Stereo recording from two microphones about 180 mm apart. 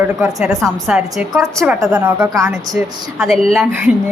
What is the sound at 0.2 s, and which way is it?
A woman's voice, 5° right (ahead or behind).